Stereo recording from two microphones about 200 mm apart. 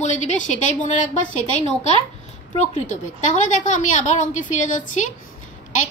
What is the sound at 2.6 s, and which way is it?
A woman's voice, 35° left (ahead or behind).